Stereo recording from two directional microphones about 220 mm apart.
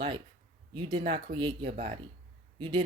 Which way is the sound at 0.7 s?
25° right (ahead or behind).